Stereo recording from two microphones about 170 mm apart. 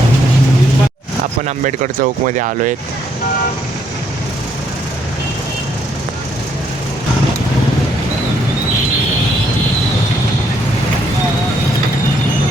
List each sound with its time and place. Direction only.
1.5 s speech: 45° right (ahead or behind)